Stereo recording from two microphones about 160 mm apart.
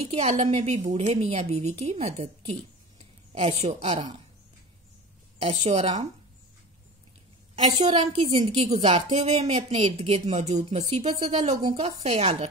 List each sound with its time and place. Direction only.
0.1 s speech: 40° right (ahead or behind)
5.4 s speech: 40° right (ahead or behind)
7.8 s speech: 40° right (ahead or behind)
8.4 s a woman's voice: 25° right (ahead or behind)
8.8 s speech: 45° right (ahead or behind)